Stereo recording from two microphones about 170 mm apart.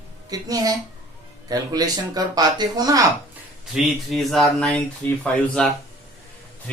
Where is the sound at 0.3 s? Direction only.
20° right (ahead or behind).